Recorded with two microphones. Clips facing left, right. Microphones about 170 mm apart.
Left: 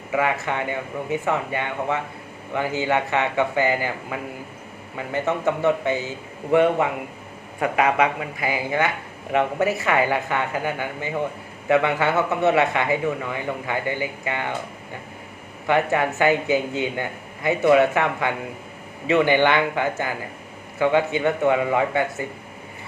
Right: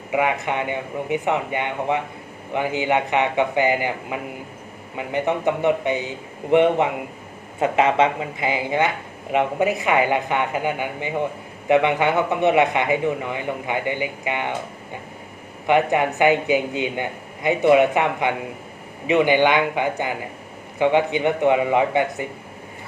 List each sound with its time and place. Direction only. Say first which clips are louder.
0.1 s a man's voice: right 1 dB; 20° right (ahead or behind)
15.6 s a man's voice: right 2 dB; 20° right (ahead or behind)